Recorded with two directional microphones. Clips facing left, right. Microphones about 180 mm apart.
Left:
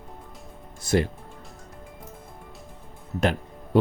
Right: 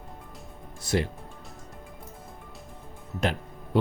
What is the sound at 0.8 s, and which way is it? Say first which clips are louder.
Speech: left 4 dB; 50° left (ahead or behind).